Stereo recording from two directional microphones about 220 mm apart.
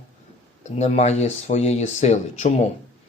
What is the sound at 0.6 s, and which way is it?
Speech, 30° left (ahead or behind).